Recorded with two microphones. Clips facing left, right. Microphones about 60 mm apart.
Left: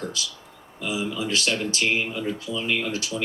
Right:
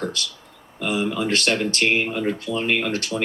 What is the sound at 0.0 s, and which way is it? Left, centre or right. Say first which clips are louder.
Speech: right 4 dB; right.